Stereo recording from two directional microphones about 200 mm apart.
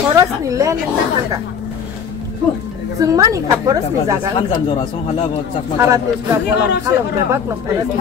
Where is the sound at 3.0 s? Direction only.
15° right (ahead or behind).